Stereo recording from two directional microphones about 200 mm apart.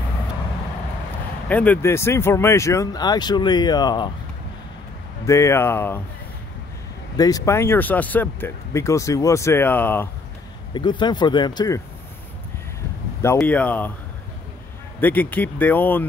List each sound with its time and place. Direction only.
1.5 s speech: 5° left (ahead or behind)
5.2 s speech: 15° left (ahead or behind)
7.2 s speech: 20° left (ahead or behind)
10.7 s speech: 25° left (ahead or behind)
13.4 s speech: 5° left (ahead or behind)
15.0 s speech: 10° left (ahead or behind)